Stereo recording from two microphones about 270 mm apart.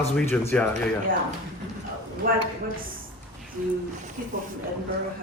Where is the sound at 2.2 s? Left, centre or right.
Right.